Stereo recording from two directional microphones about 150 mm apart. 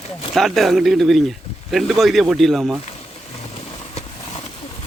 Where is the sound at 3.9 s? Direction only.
45° left (ahead or behind).